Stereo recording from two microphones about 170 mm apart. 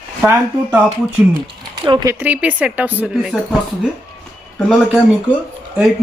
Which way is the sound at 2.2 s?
10° right (ahead or behind).